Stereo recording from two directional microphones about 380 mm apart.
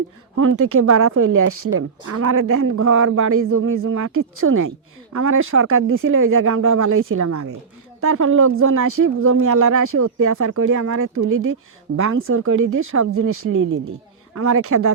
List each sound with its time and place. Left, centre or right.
0.3 s speech: right
7.2 s speech: right
8.0 s speech: right